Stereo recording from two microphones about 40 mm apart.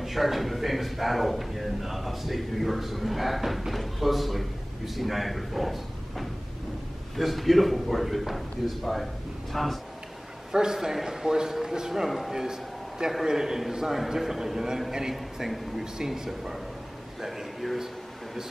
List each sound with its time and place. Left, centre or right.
0.0 s a man's voice: centre
10.5 s a man's voice: centre
11.9 s a man's voice: centre
17.2 s a sound: centre